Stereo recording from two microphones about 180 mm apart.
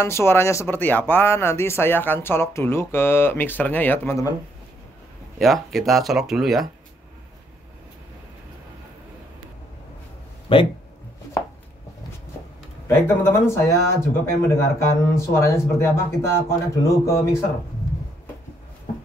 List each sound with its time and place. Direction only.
0.0 s speech: 15° left (ahead or behind)
5.4 s speech: centre (ahead or behind)
10.5 s speech: 30° left (ahead or behind)
12.8 s speech: 15° left (ahead or behind)